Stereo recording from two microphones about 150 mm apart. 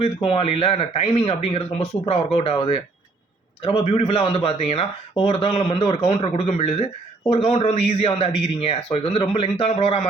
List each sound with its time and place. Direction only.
0.0 s speech: 40° left (ahead or behind)
3.6 s speech: 40° left (ahead or behind)